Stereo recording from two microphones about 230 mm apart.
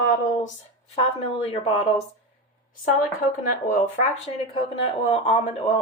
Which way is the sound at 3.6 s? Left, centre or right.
Left.